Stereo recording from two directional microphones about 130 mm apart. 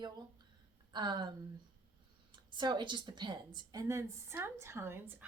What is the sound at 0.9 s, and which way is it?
Speech, 35° right (ahead or behind).